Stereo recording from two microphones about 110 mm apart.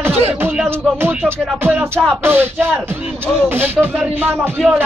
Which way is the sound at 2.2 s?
20° right (ahead or behind).